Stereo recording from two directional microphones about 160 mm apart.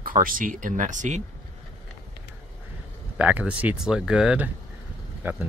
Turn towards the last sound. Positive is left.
turn(degrees=-10)  # may be behind; listen again after turning